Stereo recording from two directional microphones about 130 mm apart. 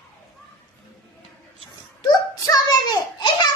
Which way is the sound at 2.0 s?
30° left (ahead or behind).